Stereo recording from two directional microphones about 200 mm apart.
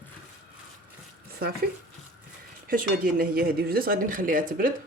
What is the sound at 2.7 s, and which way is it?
Speech, 45° right (ahead or behind).